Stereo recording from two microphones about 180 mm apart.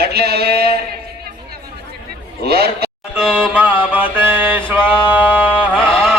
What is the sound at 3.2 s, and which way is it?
Music, 5° right (ahead or behind).